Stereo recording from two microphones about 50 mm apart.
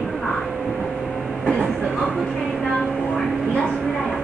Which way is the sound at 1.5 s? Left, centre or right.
Centre.